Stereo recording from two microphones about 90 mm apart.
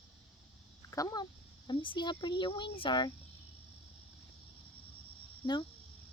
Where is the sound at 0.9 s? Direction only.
40° left (ahead or behind).